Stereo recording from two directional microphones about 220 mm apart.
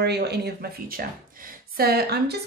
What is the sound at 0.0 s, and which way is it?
A woman's voice, 50° right (ahead or behind).